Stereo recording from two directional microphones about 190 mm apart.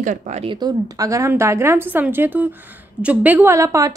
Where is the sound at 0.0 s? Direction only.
40° right (ahead or behind).